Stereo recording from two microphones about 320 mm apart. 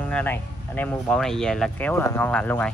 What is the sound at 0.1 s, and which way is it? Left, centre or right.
Speech, centre.